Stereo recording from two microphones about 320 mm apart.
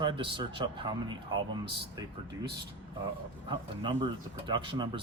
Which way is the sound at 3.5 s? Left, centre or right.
Centre.